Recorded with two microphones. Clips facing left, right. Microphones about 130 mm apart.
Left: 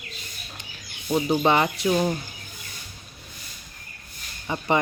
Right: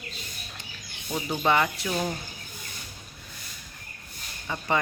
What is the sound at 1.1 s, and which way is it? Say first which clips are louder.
Speech: left 5 dB; 25° left (ahead or behind).